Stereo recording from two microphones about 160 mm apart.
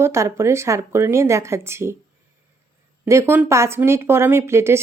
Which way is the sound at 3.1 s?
15° right (ahead or behind).